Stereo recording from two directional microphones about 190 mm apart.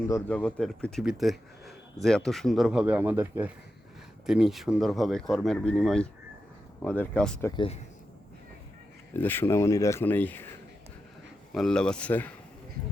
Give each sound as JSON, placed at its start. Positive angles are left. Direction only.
{"t": 0.1, "sound": "speech", "side_deg": 5}
{"t": 7.5, "sound": "speech", "side_deg": 25}
{"t": 9.1, "sound": "speech", "side_deg": 10}
{"t": 11.5, "sound": "speech", "side_deg": 5}